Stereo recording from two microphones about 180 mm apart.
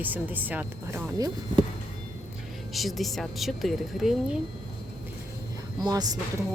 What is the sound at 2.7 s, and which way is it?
A woman's voice, centre (ahead or behind).